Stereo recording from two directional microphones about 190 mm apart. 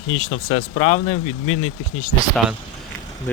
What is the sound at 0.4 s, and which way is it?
Speech, 35° left (ahead or behind).